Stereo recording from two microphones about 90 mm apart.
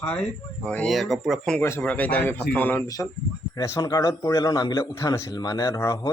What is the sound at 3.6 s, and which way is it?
A man's voice, 45° left (ahead or behind).